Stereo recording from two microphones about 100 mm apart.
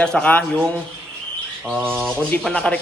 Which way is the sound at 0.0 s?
10° left (ahead or behind).